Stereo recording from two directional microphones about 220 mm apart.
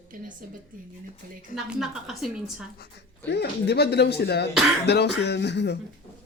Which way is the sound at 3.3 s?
50° left (ahead or behind).